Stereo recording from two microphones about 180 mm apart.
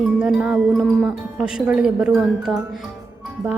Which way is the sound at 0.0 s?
5° right (ahead or behind).